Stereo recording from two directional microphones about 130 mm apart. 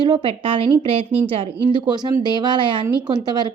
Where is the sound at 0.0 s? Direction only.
40° right (ahead or behind).